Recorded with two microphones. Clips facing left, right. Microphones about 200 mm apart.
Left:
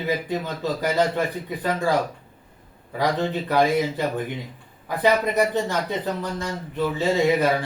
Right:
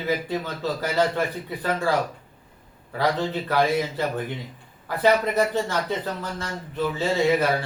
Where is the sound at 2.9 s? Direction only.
15° left (ahead or behind).